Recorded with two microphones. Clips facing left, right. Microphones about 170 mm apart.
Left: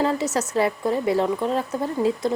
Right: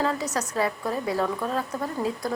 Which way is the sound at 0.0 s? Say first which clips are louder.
Left 4 dB; 30° left (ahead or behind).